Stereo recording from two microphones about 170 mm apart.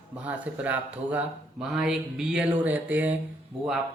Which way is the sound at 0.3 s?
10° right (ahead or behind).